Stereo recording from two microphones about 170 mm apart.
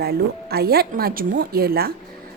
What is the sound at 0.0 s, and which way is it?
A woman's voice, 65° right (ahead or behind).